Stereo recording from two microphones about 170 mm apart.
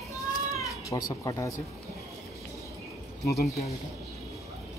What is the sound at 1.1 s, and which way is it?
Speech, 20° left (ahead or behind).